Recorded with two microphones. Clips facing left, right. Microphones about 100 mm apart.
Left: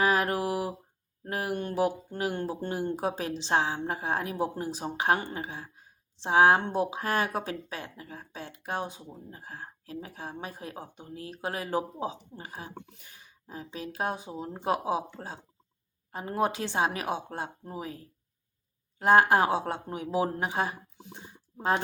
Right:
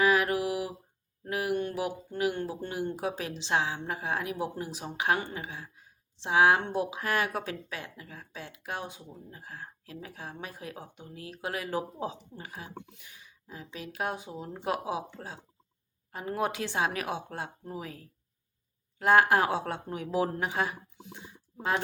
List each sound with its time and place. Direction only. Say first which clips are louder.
0.0 s mantra: even; 35° left (ahead or behind)
1.2 s speech: right 2 dB; 35° left (ahead or behind)